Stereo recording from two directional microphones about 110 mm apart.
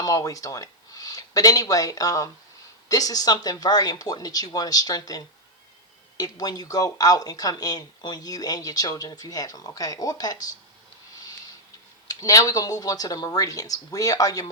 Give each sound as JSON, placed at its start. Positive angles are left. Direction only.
{"t": 0.0, "sound": "speech", "side_deg": 30}
{"t": 11.1, "sound": "a sound", "side_deg": 35}
{"t": 12.0, "sound": "speech", "side_deg": 35}